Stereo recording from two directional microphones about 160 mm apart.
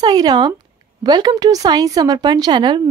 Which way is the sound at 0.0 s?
25° right (ahead or behind).